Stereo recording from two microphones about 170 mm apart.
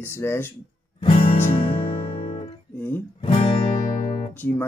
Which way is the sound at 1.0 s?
35° left (ahead or behind).